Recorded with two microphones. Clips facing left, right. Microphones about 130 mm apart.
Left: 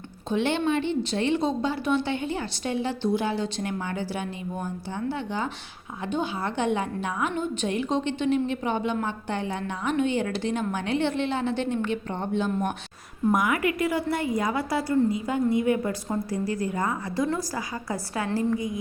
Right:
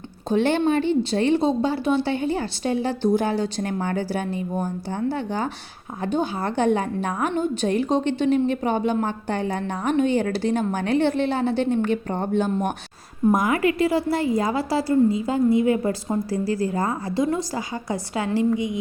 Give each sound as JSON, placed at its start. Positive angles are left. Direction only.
{"t": 0.3, "sound": "a woman's voice", "side_deg": -40}
{"t": 13.3, "sound": "a woman's voice", "side_deg": -35}
{"t": 17.3, "sound": "a woman's voice", "side_deg": -20}